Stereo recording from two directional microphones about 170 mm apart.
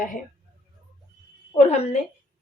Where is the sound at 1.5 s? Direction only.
40° left (ahead or behind).